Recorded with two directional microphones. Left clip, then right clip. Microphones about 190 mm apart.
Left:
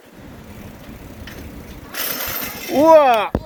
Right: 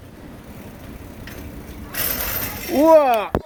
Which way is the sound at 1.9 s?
20° right (ahead or behind).